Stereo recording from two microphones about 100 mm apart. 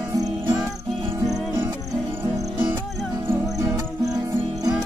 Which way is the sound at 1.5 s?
20° right (ahead or behind).